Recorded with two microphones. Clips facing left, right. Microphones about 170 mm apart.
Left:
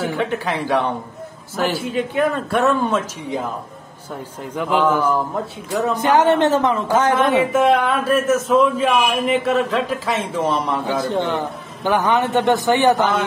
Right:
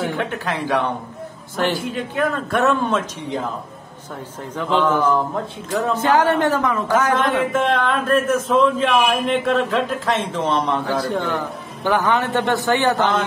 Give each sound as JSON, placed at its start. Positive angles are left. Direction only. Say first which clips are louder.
{"t": 0.0, "sound": "a man's voice", "louder": "left 2 dB", "side_deg": 5}
{"t": 4.6, "sound": "a man's voice", "louder": "left 1 dB", "side_deg": 10}
{"t": 5.9, "sound": "speech", "louder": "left 2 dB", "side_deg": 20}
{"t": 7.2, "sound": "a man's voice", "louder": "left 3 dB", "side_deg": 10}
{"t": 11.1, "sound": "a man's voice", "louder": "left 2 dB", "side_deg": 20}